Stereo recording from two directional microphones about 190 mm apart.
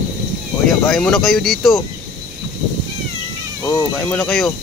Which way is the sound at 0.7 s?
Centre (ahead or behind).